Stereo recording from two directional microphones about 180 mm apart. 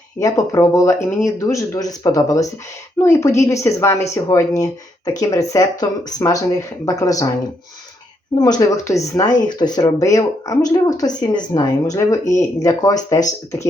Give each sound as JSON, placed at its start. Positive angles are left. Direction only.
{"t": 0.2, "sound": "a woman's voice", "side_deg": 20}
{"t": 8.4, "sound": "speech", "side_deg": 20}